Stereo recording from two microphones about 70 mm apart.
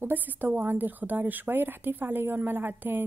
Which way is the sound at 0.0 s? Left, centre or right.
Right.